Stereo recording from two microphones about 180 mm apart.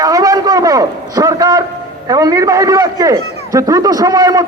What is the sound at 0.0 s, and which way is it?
A man's voice, 20° right (ahead or behind).